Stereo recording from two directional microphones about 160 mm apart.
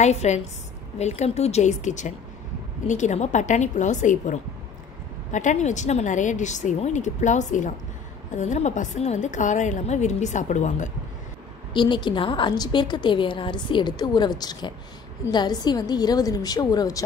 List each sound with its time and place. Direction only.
0.0 s a woman's voice: 45° left (ahead or behind)
11.7 s a woman's voice: 30° left (ahead or behind)